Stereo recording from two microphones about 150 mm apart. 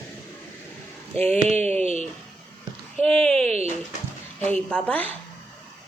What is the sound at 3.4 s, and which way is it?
Speech, 45° right (ahead or behind).